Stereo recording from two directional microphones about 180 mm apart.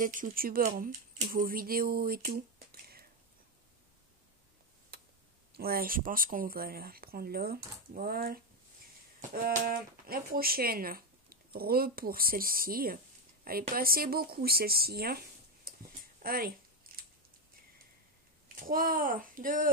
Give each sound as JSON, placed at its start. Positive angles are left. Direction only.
{"t": 0.0, "sound": "speech", "side_deg": -50}
{"t": 4.9, "sound": "tick", "side_deg": -65}
{"t": 5.5, "sound": "speech", "side_deg": -55}
{"t": 16.2, "sound": "a sound", "side_deg": -55}
{"t": 18.5, "sound": "a child's voice", "side_deg": -50}